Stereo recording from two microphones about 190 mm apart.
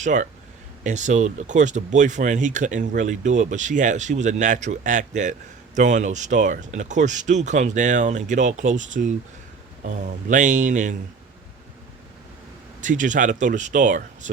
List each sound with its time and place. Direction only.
0.0 s speech: 40° right (ahead or behind)
12.8 s speech: 40° right (ahead or behind)